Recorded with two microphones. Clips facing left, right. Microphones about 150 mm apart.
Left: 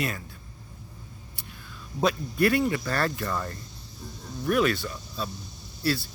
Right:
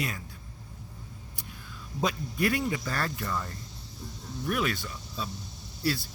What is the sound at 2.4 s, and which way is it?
Speech, 65° left (ahead or behind).